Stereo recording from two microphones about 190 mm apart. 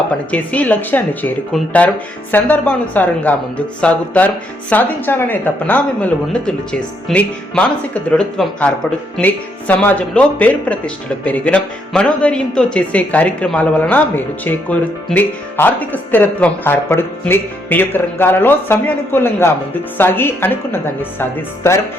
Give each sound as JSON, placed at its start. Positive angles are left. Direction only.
{"t": 0.3, "sound": "speech", "side_deg": 10}